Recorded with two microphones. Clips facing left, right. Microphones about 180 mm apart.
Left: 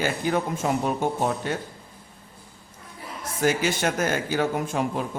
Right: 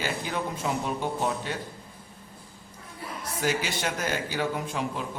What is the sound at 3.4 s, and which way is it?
Speech, 50° left (ahead or behind).